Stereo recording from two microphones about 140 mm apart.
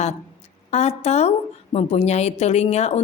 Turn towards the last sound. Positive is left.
turn(degrees=50)  # may be behind; listen again after turning